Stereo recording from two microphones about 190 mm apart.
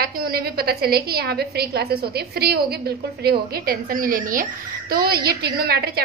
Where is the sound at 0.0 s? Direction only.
50° right (ahead or behind).